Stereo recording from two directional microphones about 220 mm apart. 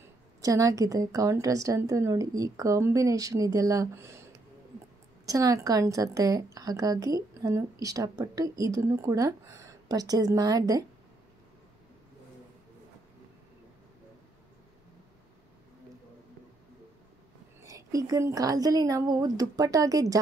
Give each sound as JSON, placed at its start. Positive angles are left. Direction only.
{"t": 0.4, "sound": "a woman's voice", "side_deg": -15}
{"t": 17.6, "sound": "a woman's voice", "side_deg": -15}